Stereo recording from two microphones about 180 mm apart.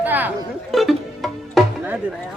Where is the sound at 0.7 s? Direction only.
Centre (ahead or behind).